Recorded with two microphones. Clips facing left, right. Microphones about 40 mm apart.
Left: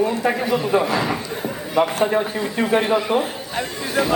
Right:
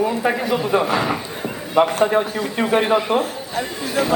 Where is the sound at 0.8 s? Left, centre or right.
Right.